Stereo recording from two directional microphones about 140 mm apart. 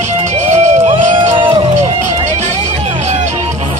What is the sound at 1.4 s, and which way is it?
Music, 35° right (ahead or behind).